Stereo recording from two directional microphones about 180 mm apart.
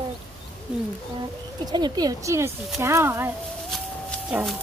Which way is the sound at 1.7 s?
25° right (ahead or behind).